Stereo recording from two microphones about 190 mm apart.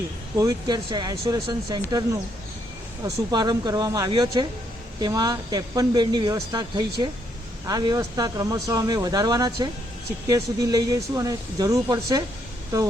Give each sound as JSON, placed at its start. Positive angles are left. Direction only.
{"t": 0.3, "sound": "speech", "side_deg": -20}